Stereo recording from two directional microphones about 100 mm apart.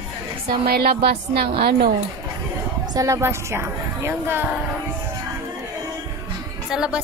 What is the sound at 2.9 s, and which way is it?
A woman's voice, 30° right (ahead or behind).